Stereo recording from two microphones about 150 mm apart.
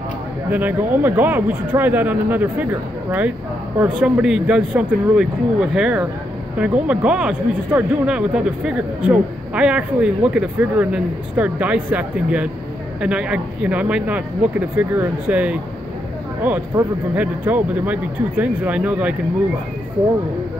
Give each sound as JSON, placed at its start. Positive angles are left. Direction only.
{"t": 0.5, "sound": "speech", "side_deg": -10}